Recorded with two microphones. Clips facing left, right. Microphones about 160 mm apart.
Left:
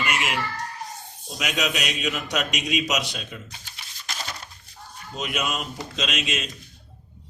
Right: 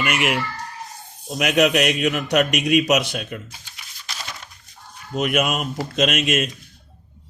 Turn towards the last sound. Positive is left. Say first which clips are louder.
# right 9 dB
turn(degrees=-55)  # may be behind; listen again after turning